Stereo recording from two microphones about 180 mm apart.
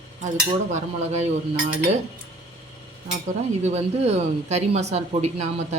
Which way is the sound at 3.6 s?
35° right (ahead or behind).